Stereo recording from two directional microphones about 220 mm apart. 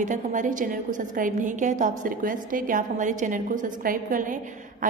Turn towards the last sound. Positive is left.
turn(degrees=-40)  # may be behind; listen again after turning